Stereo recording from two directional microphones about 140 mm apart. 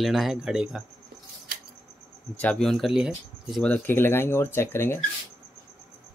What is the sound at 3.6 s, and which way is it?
Speech, 15° left (ahead or behind).